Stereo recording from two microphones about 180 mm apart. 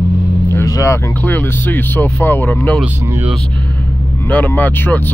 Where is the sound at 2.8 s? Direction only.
10° right (ahead or behind).